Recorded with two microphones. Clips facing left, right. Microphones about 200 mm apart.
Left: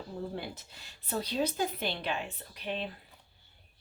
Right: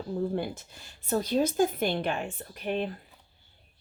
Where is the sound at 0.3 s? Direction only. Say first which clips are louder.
Right 8 dB; 50° right (ahead or behind).